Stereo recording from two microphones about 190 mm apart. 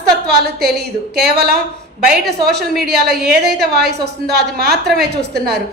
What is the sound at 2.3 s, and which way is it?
Speech, 60° right (ahead or behind).